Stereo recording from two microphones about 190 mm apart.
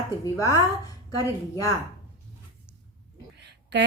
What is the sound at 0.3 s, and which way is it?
Speech, 15° left (ahead or behind).